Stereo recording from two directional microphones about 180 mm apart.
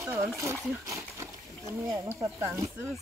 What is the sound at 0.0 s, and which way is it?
Speech, 15° right (ahead or behind).